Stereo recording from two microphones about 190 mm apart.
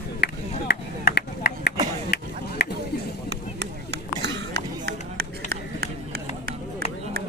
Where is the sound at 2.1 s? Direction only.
55° left (ahead or behind).